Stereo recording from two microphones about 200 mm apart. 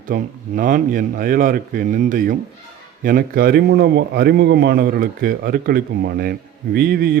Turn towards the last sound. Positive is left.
turn(degrees=-50)  # may be behind; listen again after turning